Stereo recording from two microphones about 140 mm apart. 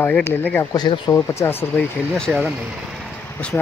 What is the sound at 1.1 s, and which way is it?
Speech, 20° left (ahead or behind).